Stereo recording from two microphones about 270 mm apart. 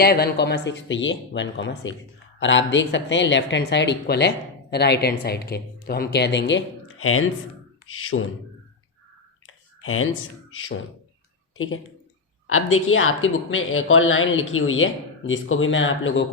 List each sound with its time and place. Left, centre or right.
0.0 s speech: left
9.5 s clicking: left
11.5 s speech: left